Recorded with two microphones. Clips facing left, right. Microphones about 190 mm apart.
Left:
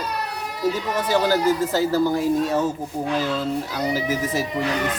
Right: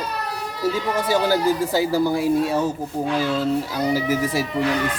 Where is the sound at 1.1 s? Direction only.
10° right (ahead or behind).